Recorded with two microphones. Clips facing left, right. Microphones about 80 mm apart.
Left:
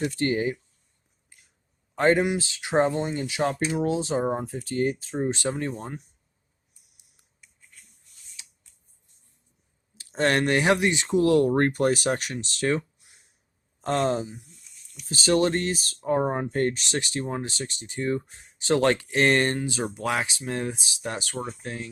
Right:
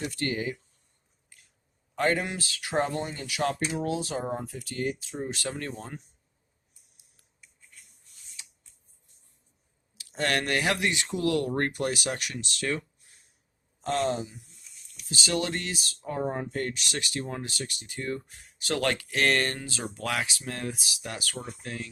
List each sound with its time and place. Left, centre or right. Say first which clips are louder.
0.0 s speech: left 6 dB; left
1.3 s squish: left 1 dB; left
2.0 s speech: left 6 dB; left
5.4 s speech: left 6 dB; left
9.9 s speech: left 5 dB; left
13.8 s speech: left 3 dB; left